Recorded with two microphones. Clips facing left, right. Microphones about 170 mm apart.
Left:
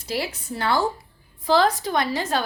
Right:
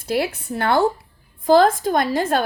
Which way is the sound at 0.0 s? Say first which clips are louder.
Right 6 dB; 55° right (ahead or behind).